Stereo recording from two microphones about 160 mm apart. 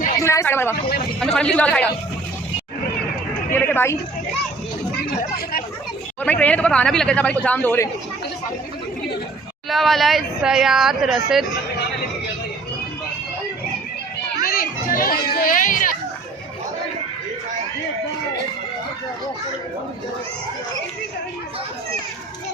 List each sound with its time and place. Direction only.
0.2 s speech: 20° left (ahead or behind)
1.2 s speech: 5° left (ahead or behind)
3.5 s speech: 15° left (ahead or behind)
5.2 s speech: 70° left (ahead or behind)
6.2 s speech: 10° left (ahead or behind)
9.6 s speech: centre (ahead or behind)
14.4 s children playing: 65° left (ahead or behind)